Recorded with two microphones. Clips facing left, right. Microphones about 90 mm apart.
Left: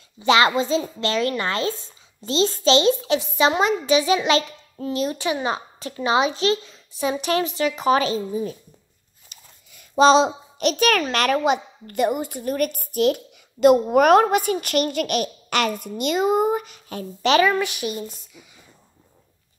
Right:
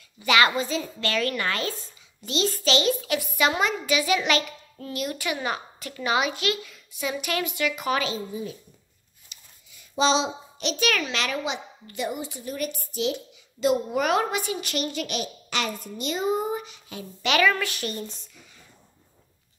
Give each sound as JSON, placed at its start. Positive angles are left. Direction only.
{"t": 0.2, "sound": "a child's voice", "side_deg": 30}
{"t": 17.3, "sound": "a woman's voice", "side_deg": 20}